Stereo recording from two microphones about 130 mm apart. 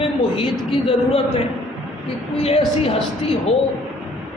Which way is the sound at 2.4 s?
50° left (ahead or behind).